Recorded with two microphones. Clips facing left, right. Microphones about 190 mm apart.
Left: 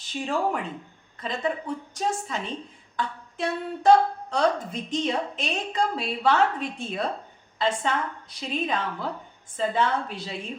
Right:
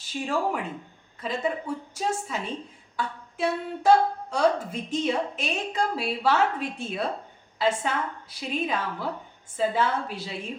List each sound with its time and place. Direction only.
0.0 s a woman's voice: 5° right (ahead or behind)